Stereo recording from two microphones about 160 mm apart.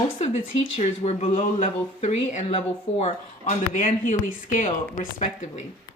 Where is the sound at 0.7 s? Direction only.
40° left (ahead or behind).